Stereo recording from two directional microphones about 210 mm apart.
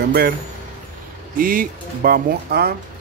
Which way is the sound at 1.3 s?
40° right (ahead or behind).